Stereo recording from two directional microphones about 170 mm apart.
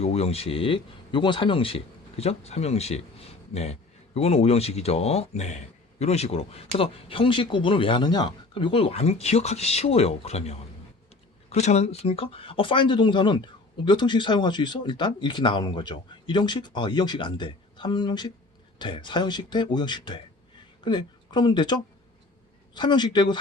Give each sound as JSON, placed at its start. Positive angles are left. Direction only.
{"t": 0.0, "sound": "speech", "side_deg": 40}